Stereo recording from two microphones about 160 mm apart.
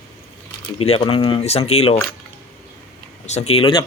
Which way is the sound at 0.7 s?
40° left (ahead or behind).